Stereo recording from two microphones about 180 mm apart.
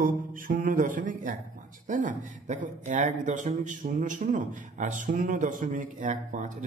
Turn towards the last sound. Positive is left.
turn(degrees=-40)  # may be behind; listen again after turning